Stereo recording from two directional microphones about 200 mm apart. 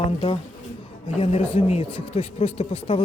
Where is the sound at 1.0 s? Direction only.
30° left (ahead or behind).